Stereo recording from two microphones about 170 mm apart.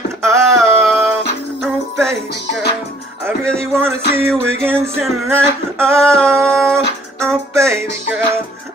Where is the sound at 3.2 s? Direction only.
15° right (ahead or behind).